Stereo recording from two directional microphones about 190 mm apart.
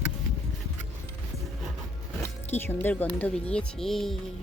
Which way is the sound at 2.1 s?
10° left (ahead or behind).